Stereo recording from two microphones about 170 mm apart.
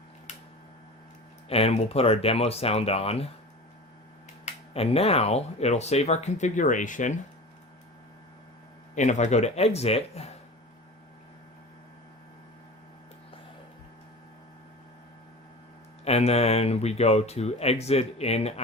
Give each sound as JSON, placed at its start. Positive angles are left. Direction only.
{"t": 1.5, "sound": "speech", "side_deg": 35}
{"t": 4.4, "sound": "speech", "side_deg": 35}
{"t": 9.0, "sound": "speech", "side_deg": 45}
{"t": 16.0, "sound": "speech", "side_deg": 40}